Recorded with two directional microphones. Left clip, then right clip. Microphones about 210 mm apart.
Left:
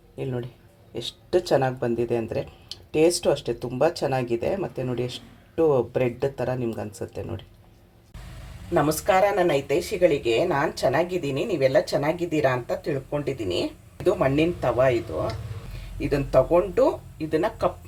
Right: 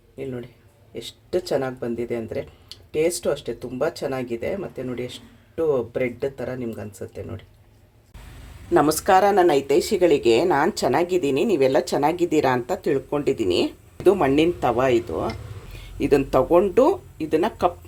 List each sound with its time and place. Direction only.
0.2 s speech: 5° left (ahead or behind)
8.7 s speech: 45° right (ahead or behind)